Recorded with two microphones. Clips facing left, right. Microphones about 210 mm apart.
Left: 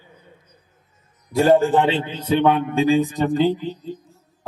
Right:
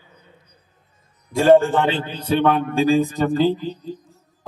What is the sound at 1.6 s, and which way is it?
A man's voice, 15° left (ahead or behind).